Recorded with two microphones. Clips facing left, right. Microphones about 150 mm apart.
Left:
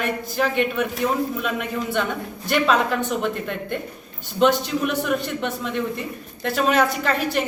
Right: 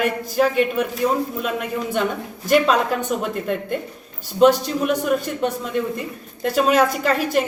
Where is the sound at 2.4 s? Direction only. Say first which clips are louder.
Right 3 dB; 40° right (ahead or behind).